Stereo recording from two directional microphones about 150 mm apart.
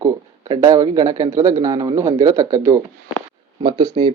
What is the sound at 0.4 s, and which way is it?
Speech, 25° right (ahead or behind).